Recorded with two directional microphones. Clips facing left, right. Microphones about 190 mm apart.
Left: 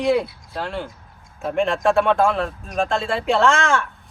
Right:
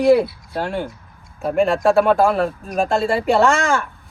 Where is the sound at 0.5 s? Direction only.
55° right (ahead or behind).